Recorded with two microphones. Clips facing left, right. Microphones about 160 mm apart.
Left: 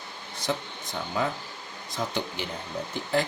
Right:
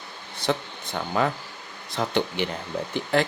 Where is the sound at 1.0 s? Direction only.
70° right (ahead or behind).